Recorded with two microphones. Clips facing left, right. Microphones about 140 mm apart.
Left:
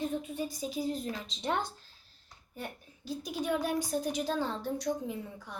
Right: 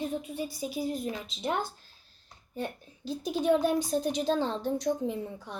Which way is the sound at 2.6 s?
20° right (ahead or behind).